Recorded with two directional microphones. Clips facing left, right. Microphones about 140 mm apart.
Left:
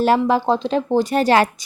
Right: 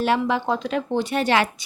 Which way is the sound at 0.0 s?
40° left (ahead or behind).